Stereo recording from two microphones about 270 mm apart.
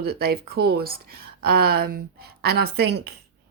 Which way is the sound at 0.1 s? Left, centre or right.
Right.